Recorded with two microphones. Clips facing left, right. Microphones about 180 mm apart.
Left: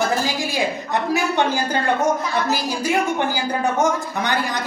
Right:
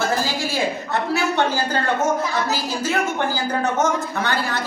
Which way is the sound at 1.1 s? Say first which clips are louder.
Even; 15° left (ahead or behind).